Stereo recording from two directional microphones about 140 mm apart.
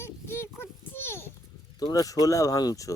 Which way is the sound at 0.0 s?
15° left (ahead or behind).